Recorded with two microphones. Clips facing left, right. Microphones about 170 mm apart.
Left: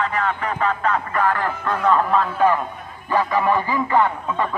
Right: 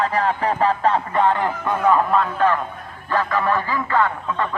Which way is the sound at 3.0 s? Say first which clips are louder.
Left 2 dB; 15° left (ahead or behind).